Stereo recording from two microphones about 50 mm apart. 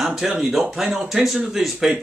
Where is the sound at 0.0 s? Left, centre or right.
Centre.